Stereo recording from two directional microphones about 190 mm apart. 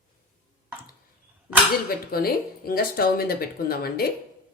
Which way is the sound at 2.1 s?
50° left (ahead or behind).